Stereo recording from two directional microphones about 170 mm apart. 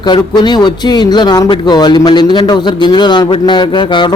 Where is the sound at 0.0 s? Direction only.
25° left (ahead or behind).